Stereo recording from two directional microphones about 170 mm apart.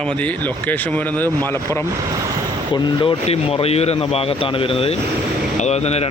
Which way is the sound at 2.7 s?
30° left (ahead or behind).